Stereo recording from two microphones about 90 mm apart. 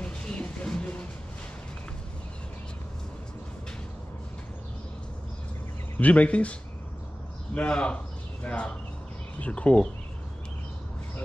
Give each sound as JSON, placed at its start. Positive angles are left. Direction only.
{"t": 0.0, "sound": "a sound", "side_deg": 10}
{"t": 5.9, "sound": "speech", "side_deg": 15}
{"t": 7.5, "sound": "speech", "side_deg": 10}